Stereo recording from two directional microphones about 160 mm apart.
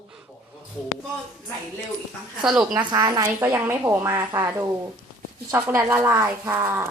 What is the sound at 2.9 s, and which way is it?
A woman's voice, 25° right (ahead or behind).